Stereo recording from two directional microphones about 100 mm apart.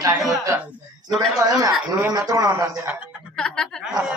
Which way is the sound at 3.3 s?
10° left (ahead or behind).